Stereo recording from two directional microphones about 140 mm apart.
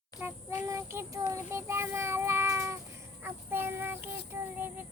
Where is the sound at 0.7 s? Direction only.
20° right (ahead or behind).